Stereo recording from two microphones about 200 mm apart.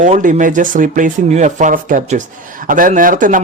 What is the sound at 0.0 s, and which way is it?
Speech, 40° right (ahead or behind).